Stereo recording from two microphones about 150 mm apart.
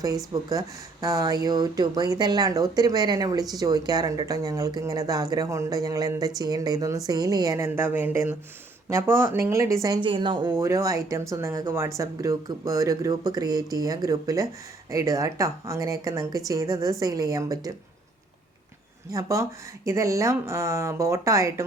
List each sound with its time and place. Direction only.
1.0 s speech: 25° right (ahead or behind)
19.1 s speech: 20° right (ahead or behind)